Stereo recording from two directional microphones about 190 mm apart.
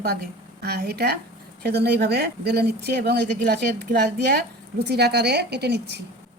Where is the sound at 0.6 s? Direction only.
60° right (ahead or behind).